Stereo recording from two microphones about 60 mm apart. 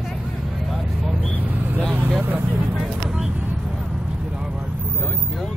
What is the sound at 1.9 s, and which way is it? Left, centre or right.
Vehicle, right.